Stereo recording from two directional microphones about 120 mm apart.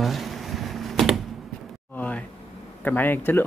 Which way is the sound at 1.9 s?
10° left (ahead or behind).